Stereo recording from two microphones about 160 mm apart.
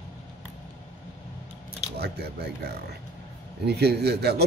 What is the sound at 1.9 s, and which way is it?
A man's voice, 90° right.